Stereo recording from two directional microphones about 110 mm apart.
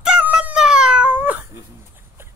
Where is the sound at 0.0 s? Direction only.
10° right (ahead or behind).